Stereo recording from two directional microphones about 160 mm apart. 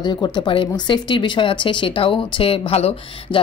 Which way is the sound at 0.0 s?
25° left (ahead or behind).